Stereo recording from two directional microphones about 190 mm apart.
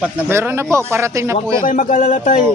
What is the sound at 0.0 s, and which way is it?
Speech, 10° right (ahead or behind).